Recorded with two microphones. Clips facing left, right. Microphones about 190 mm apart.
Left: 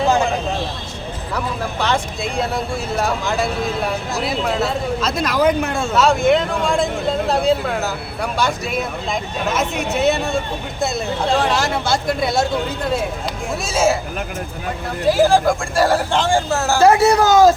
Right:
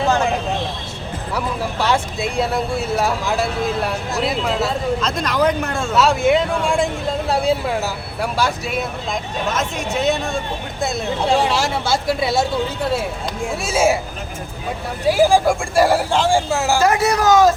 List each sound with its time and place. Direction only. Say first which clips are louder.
1.8 s speech: right 1 dB; 5° right (ahead or behind)
6.0 s speech: even; 5° right (ahead or behind)
11.3 s speech: even; 10° right (ahead or behind)
13.7 s speech: even; 10° right (ahead or behind)
15.0 s speech: even; 10° right (ahead or behind)
16.8 s a man's voice: left 6 dB; 30° left (ahead or behind)